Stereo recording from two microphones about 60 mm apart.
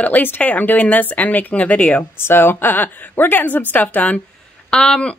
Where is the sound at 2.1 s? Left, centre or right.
Left.